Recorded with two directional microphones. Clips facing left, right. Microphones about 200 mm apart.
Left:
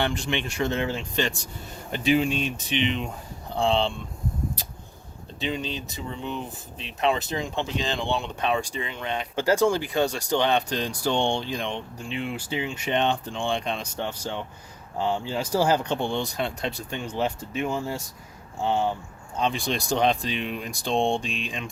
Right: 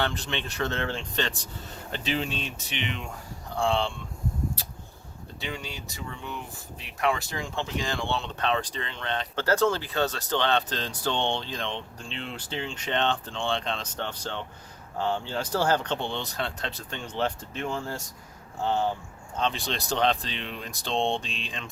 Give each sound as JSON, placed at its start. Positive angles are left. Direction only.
{"t": 0.0, "sound": "speech", "side_deg": 15}
{"t": 5.4, "sound": "speech", "side_deg": 20}